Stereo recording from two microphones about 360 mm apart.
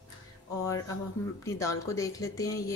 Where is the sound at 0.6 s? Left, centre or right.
Centre.